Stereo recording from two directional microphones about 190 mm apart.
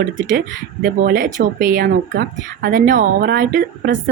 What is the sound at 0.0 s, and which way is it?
Speech, 45° right (ahead or behind).